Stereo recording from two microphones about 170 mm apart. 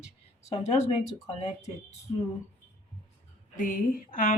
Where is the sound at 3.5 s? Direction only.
50° left (ahead or behind).